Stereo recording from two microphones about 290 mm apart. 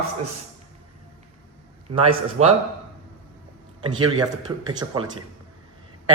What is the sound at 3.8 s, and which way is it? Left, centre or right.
Speech, centre.